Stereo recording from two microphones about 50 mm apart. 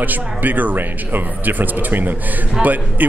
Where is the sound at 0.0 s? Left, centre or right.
Right.